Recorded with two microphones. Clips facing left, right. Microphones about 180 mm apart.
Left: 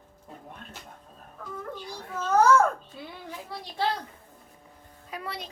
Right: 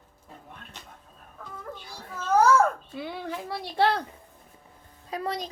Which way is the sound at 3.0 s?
80° right.